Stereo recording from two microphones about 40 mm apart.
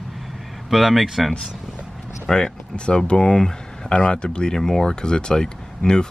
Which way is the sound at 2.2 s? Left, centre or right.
Centre.